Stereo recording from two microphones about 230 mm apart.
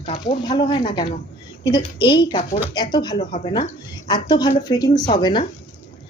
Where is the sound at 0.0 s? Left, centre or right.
Left.